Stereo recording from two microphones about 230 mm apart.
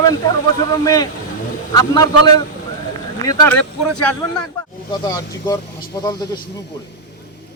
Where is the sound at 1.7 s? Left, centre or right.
Centre.